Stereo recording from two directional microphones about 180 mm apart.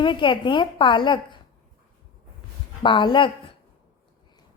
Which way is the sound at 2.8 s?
25° left (ahead or behind).